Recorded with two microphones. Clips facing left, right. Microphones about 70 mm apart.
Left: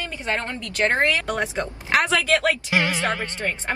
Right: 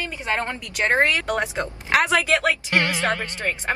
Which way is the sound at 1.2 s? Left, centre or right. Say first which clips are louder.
Right 1 dB; centre.